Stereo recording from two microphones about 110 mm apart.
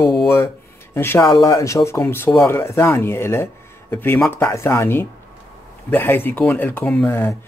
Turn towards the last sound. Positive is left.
turn(degrees=20)  # may be behind; listen again after turning